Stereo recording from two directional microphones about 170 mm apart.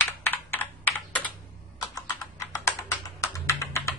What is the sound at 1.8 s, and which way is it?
Computer keyboard, 20° left (ahead or behind).